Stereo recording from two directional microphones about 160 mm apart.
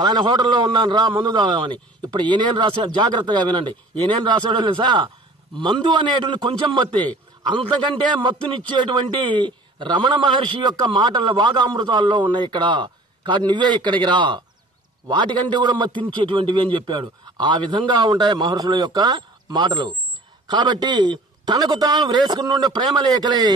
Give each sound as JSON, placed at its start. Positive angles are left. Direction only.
{"t": 0.0, "sound": "a man's voice", "side_deg": -25}